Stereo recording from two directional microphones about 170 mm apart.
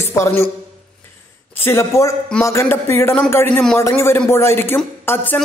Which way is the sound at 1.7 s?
15° left (ahead or behind).